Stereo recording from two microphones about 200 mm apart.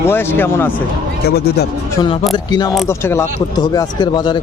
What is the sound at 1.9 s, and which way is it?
Speech, 20° left (ahead or behind).